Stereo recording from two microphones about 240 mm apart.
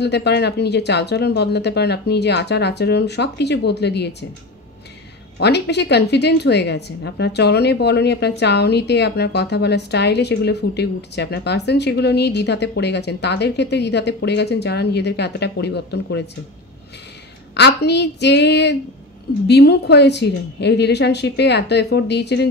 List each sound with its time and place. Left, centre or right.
0.0 s a woman's voice: left
5.4 s a woman's voice: left
17.6 s a woman's voice: left